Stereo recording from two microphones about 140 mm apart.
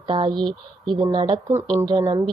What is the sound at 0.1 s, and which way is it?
Speech, 35° right (ahead or behind).